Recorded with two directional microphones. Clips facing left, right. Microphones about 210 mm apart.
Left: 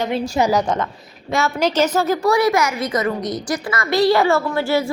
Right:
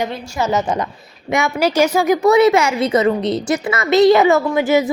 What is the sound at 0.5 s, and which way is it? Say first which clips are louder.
A woman's voice: even; 10° right (ahead or behind).